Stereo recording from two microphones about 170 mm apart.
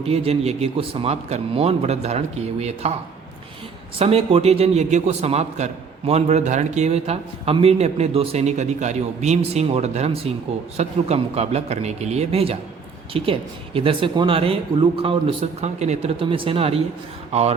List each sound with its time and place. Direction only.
0.0 s a man's voice: 35° right (ahead or behind)
3.9 s a man's voice: 35° right (ahead or behind)